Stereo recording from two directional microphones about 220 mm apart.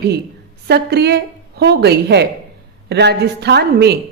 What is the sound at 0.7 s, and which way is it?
A woman's voice, 50° right (ahead or behind).